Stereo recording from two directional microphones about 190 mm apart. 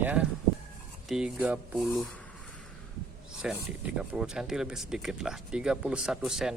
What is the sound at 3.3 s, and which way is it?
Speech, 5° right (ahead or behind).